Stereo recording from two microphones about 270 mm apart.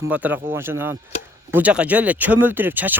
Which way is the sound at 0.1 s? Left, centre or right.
Centre.